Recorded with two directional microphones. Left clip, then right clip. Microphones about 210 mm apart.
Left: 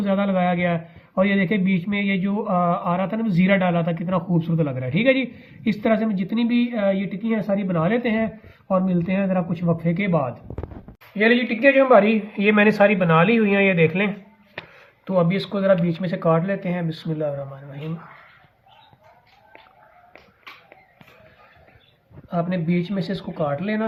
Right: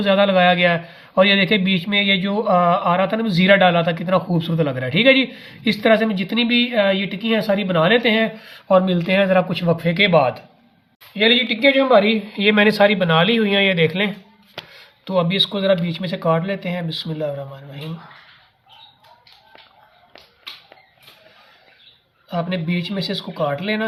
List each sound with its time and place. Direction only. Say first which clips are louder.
0.0 s a man's voice: right 7 dB; 15° right (ahead or behind)
17.1 s speech: left 1 dB; 25° right (ahead or behind)
17.3 s a man's voice: right 1 dB; 15° right (ahead or behind)
22.3 s speech: right 1 dB; 20° right (ahead or behind)